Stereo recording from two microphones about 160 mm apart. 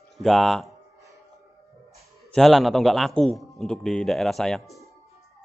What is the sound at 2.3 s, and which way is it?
A man's voice, centre (ahead or behind).